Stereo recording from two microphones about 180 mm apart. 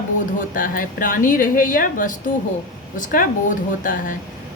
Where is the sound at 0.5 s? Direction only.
50° left (ahead or behind).